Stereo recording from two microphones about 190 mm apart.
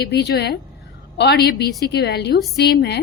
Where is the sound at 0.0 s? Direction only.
60° left (ahead or behind).